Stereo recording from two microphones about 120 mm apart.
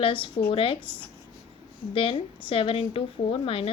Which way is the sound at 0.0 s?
45° left (ahead or behind).